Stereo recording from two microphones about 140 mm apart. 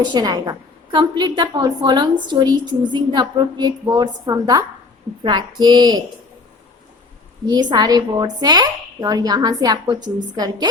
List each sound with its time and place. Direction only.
0.0 s a woman's voice: 30° right (ahead or behind)
7.4 s speech: 30° right (ahead or behind)